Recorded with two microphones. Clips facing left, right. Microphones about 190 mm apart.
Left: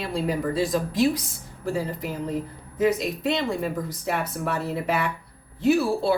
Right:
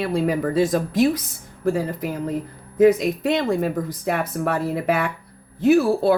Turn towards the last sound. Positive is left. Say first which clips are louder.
# right 5 dB
turn(degrees=-50)  # may be behind; listen again after turning